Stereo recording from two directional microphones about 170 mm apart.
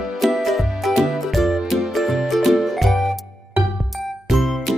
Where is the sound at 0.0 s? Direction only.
Centre (ahead or behind).